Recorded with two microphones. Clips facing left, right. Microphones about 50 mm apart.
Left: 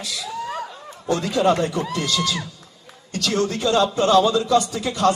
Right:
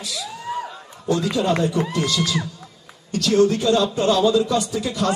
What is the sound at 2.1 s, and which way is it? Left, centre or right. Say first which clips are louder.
Speech: even; left.